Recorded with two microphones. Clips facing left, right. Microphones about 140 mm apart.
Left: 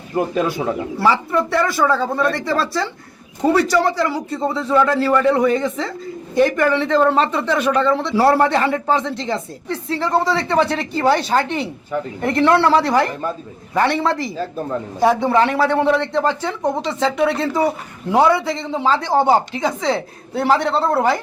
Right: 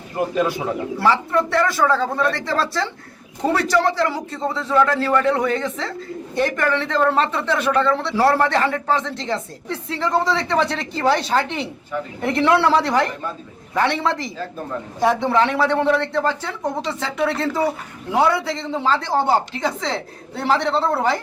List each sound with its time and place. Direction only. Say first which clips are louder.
0.9 s speech: left 1 dB; 10° left (ahead or behind)
9.6 s a woman's voice: left 2 dB; centre (ahead or behind)